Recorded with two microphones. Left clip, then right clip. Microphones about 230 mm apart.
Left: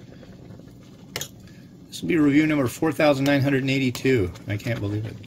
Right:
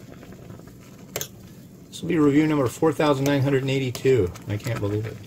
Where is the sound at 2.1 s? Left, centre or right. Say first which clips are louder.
Even; left.